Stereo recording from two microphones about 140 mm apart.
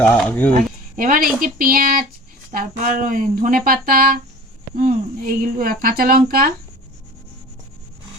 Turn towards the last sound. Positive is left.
turn(degrees=-90)